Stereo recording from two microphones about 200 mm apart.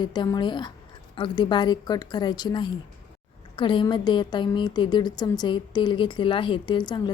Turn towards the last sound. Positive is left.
turn(degrees=20)  # may be behind; listen again after turning